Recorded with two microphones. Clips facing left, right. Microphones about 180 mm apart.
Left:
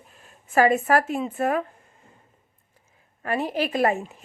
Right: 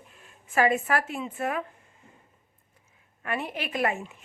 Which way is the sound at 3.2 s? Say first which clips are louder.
Left 7 dB; 35° left (ahead or behind).